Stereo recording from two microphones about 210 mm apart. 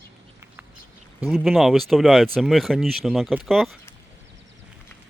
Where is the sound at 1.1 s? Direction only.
Centre (ahead or behind).